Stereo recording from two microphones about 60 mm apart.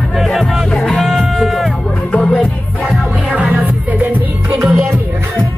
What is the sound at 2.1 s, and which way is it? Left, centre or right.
Music, left.